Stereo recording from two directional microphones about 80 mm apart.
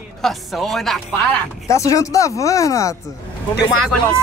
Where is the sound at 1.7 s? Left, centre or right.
Left.